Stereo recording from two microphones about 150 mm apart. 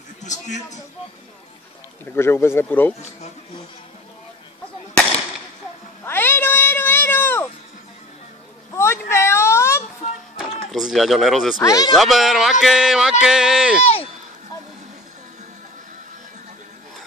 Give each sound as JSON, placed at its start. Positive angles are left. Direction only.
{"t": 0.2, "sound": "a man's voice", "side_deg": 50}
{"t": 2.1, "sound": "speech", "side_deg": 15}
{"t": 6.0, "sound": "a sound", "side_deg": 15}
{"t": 8.7, "sound": "a sound", "side_deg": 15}
{"t": 10.3, "sound": "speech", "side_deg": 0}
{"t": 11.6, "sound": "speech", "side_deg": 25}
{"t": 12.0, "sound": "speech", "side_deg": 0}